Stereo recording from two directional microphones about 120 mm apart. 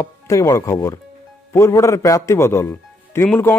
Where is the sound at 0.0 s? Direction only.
25° left (ahead or behind).